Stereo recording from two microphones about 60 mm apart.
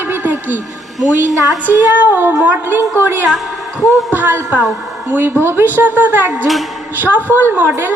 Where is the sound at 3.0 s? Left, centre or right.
Right.